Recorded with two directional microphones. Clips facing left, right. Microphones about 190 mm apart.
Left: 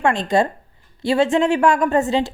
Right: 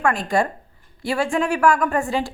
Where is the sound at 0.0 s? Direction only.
25° left (ahead or behind).